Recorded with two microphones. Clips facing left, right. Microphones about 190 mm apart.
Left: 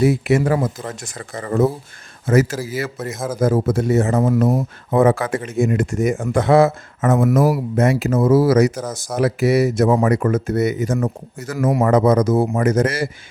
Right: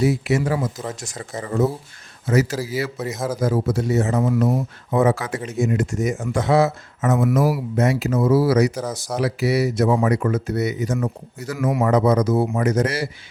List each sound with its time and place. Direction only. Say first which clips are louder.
0.0 s speech: left 4 dB; 55° left (ahead or behind)